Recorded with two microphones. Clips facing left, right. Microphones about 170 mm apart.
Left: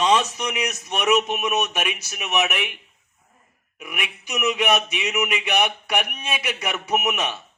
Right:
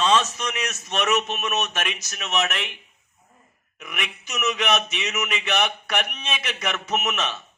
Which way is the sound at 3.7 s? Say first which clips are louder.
Left 1 dB; 10° left (ahead or behind).